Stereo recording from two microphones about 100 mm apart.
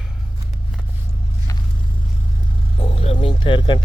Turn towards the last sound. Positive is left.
turn(degrees=55)  # may be behind; listen again after turning